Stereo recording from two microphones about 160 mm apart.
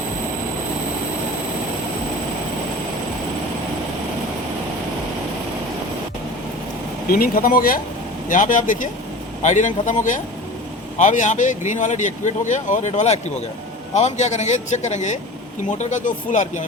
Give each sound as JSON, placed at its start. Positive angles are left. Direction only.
{"t": 7.1, "sound": "speech", "side_deg": 65}
{"t": 8.3, "sound": "speech", "side_deg": 55}